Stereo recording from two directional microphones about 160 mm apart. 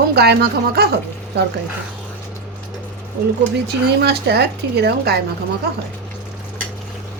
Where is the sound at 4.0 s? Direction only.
90° right.